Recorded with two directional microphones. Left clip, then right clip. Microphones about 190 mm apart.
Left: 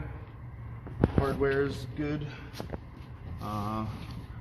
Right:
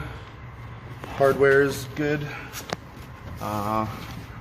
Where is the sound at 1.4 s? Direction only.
55° right (ahead or behind).